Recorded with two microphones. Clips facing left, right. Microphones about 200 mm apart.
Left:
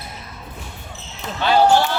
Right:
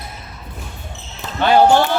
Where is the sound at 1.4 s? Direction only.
55° right (ahead or behind).